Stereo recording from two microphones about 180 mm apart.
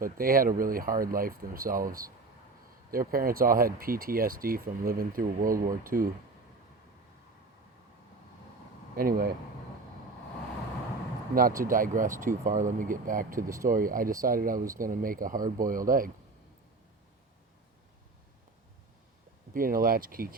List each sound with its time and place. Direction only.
0.0 s speech: 50° right (ahead or behind)
9.0 s speech: 55° right (ahead or behind)
11.3 s speech: 50° right (ahead or behind)
19.5 s speech: 50° right (ahead or behind)